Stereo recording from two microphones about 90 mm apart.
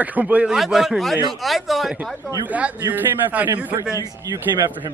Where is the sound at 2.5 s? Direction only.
15° right (ahead or behind).